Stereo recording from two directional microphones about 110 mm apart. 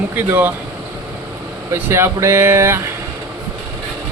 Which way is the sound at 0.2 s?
20° right (ahead or behind).